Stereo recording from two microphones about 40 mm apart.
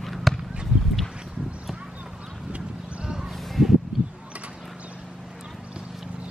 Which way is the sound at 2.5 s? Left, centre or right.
Right.